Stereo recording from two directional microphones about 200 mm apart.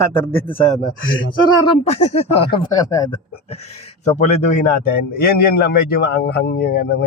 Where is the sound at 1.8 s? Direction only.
30° left (ahead or behind).